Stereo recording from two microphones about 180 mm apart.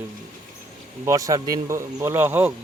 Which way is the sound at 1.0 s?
20° right (ahead or behind).